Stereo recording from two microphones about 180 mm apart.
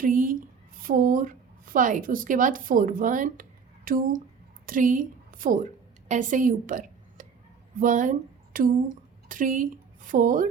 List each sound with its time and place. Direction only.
0.0 s a woman's voice: 50° right (ahead or behind)